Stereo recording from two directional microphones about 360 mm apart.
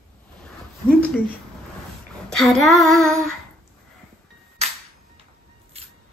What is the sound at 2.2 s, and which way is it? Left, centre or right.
Child singing, centre.